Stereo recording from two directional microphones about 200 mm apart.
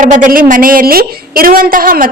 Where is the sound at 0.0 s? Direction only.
40° right (ahead or behind).